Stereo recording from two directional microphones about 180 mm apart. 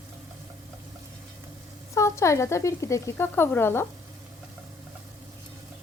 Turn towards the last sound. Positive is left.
turn(degrees=10)  # may be behind; listen again after turning